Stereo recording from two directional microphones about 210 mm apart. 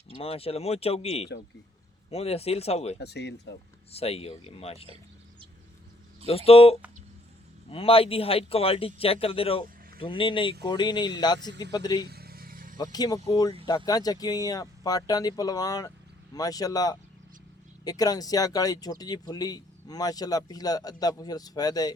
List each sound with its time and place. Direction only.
0.2 s speech: 25° left (ahead or behind)
3.0 s speech: 55° left (ahead or behind)
3.9 s speech: 30° left (ahead or behind)
6.2 s speech: 30° left (ahead or behind)
12.0 s vehicle: 50° right (ahead or behind)
12.7 s speech: 20° left (ahead or behind)